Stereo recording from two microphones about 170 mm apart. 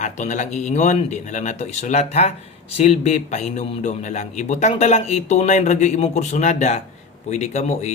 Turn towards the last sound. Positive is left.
turn(degrees=40)  # may be behind; listen again after turning